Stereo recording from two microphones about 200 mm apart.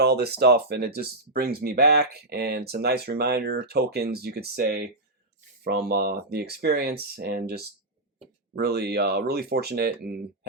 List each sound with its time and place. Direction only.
0.0 s speech: 55° right (ahead or behind)